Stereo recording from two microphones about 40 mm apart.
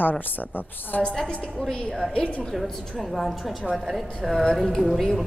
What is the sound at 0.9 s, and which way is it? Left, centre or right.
Speech, left.